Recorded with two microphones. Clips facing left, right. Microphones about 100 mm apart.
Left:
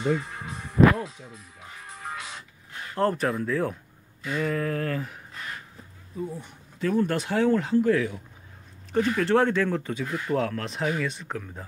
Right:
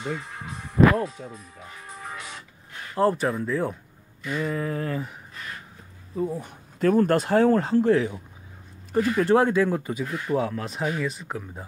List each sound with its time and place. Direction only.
0.9 s speech: 50° right (ahead or behind)
2.9 s speech: 5° right (ahead or behind)
6.1 s speech: 50° right (ahead or behind); by 11.4 s 5° right (ahead or behind)